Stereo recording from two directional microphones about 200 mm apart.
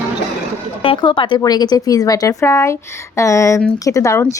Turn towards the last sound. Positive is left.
turn(degrees=15)  # may be behind; listen again after turning